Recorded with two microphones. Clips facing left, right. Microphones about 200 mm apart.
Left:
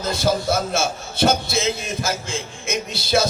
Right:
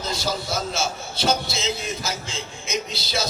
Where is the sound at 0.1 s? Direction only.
55° left (ahead or behind).